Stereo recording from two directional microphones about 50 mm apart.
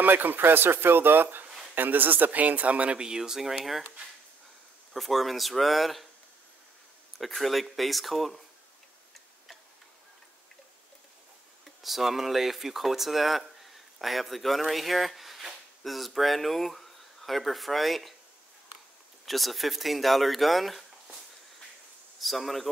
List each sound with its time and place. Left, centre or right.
0.0 s speech: right
3.0 s speech: centre
4.9 s speech: centre
7.2 s speech: centre
11.6 s speech: centre
19.2 s speech: centre
22.2 s speech: centre